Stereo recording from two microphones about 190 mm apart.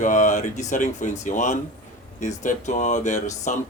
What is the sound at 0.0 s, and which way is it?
Speech, 40° left (ahead or behind).